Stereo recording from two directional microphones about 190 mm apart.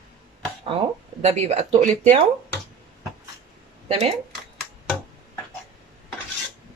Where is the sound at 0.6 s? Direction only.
30° right (ahead or behind).